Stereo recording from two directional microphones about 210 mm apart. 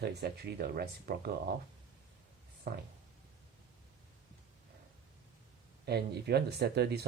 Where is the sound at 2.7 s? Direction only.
45° right (ahead or behind).